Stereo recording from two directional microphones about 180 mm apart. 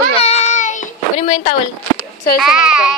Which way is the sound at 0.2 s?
40° left (ahead or behind).